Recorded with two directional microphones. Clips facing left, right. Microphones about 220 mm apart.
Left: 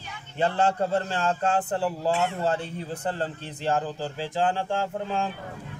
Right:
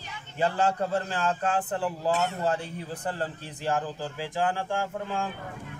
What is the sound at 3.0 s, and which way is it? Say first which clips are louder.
A man's voice: left 2 dB; 25° left (ahead or behind).